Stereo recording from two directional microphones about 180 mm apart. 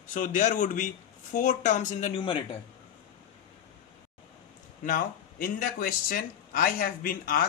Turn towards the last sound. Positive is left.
turn(degrees=55)  # may be behind; listen again after turning